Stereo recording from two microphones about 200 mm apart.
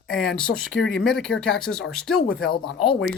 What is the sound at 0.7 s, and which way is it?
Speech, 65° left (ahead or behind).